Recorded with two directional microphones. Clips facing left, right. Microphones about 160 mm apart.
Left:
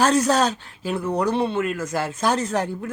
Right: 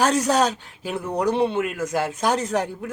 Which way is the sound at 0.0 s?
15° right (ahead or behind).